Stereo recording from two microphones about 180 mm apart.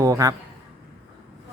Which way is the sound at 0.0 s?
20° right (ahead or behind).